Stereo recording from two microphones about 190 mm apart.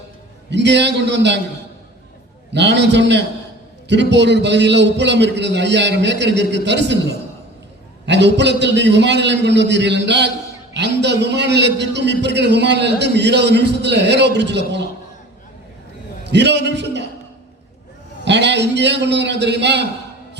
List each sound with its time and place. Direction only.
0.5 s a man's voice: 65° right (ahead or behind)
2.5 s a man's voice: 65° right (ahead or behind)
16.2 s a man's voice: 65° right (ahead or behind)
18.3 s a man's voice: 65° right (ahead or behind)